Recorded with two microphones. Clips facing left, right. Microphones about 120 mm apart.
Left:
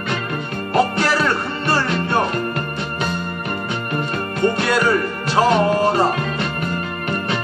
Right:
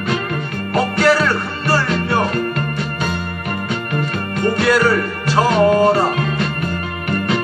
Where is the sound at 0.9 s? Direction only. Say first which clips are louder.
Right 4 dB; 25° left (ahead or behind).